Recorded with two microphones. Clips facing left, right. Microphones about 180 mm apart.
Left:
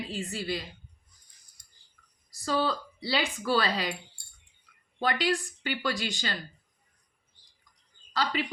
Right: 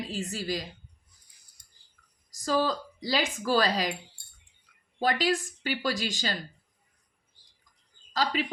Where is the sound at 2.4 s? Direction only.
40° right (ahead or behind).